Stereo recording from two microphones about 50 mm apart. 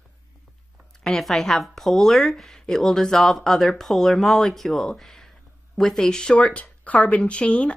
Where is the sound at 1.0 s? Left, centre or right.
Centre.